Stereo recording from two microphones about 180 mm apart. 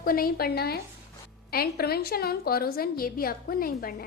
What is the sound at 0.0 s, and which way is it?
A woman's voice, 55° left (ahead or behind).